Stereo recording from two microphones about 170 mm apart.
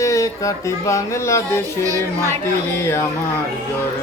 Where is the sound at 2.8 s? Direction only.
15° left (ahead or behind).